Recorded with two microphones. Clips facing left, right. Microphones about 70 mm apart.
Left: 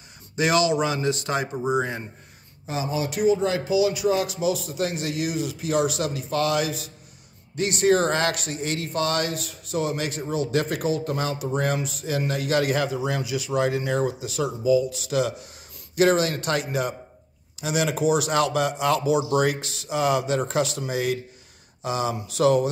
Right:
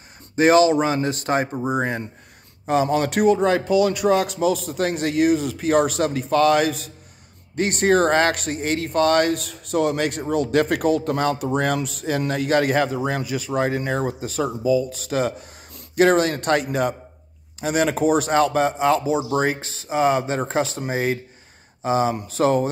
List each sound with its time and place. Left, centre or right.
0.4 s speech: right